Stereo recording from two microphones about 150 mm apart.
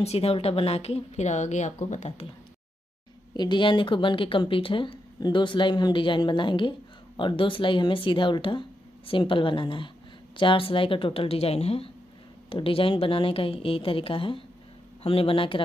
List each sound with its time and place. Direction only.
0.0 s a woman's voice: 45° left (ahead or behind)
3.3 s speech: 30° left (ahead or behind)